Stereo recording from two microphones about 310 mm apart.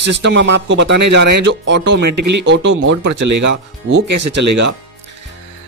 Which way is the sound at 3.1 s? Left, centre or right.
Right.